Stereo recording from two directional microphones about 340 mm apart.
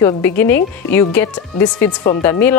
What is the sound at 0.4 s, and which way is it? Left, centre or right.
Speech, centre.